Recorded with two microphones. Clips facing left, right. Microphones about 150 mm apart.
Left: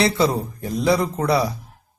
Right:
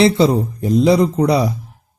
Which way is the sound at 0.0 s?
25° right (ahead or behind).